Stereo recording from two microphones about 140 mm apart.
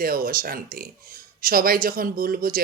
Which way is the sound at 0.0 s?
90° right.